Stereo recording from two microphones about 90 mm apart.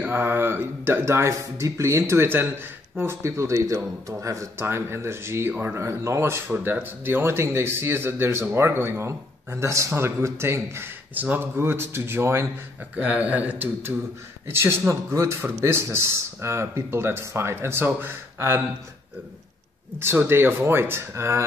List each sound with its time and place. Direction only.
0.0 s speech: 25° right (ahead or behind)
12.9 s speech: 15° right (ahead or behind)
20.0 s speech: 25° right (ahead or behind)